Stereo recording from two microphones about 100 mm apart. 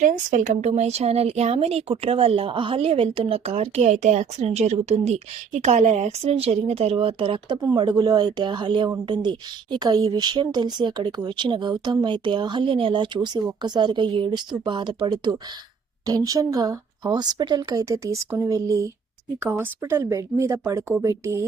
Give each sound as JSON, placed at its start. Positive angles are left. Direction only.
{"t": 0.7, "sound": "a woman's voice", "side_deg": -90}
{"t": 7.8, "sound": "speech", "side_deg": -45}
{"t": 19.4, "sound": "speech", "side_deg": -25}